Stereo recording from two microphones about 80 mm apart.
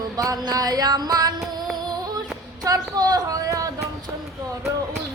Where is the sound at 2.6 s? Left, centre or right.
Right.